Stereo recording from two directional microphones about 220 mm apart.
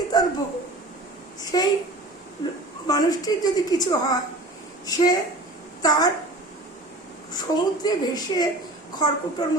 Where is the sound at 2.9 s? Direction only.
15° left (ahead or behind).